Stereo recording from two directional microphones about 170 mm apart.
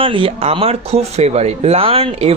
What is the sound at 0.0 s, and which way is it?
Speech, 30° right (ahead or behind).